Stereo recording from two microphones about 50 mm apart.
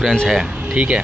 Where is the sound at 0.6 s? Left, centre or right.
Right.